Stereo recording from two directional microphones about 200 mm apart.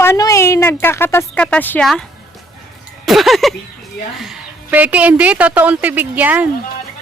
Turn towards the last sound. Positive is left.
turn(degrees=-10)  # may be behind; listen again after turning